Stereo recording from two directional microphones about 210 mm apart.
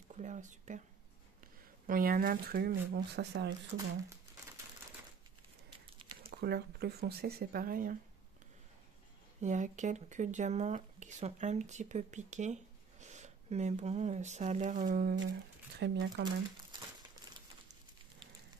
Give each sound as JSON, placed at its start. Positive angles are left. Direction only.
{"t": 0.1, "sound": "speech", "side_deg": -35}
{"t": 1.9, "sound": "speech", "side_deg": -40}
{"t": 6.2, "sound": "speech", "side_deg": -50}
{"t": 9.4, "sound": "speech", "side_deg": -35}
{"t": 15.7, "sound": "speech", "side_deg": -55}